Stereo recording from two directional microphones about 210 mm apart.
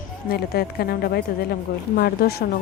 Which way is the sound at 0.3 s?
50° left (ahead or behind).